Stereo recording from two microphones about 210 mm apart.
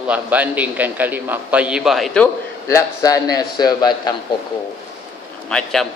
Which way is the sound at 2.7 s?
15° left (ahead or behind).